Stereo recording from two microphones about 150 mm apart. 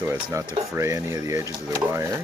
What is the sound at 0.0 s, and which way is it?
Speech, 20° right (ahead or behind).